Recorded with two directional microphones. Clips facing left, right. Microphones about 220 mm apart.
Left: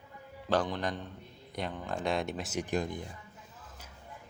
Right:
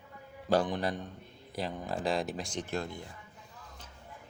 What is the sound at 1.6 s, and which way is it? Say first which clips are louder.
Speech: right 1 dB; 5° right (ahead or behind).